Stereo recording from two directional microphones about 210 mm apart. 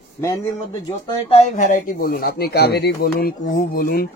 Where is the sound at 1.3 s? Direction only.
35° left (ahead or behind).